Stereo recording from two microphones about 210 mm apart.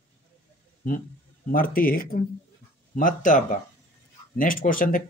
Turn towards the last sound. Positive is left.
turn(degrees=40)  # may be behind; listen again after turning